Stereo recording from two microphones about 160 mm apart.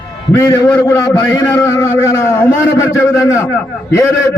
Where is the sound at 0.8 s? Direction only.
20° left (ahead or behind).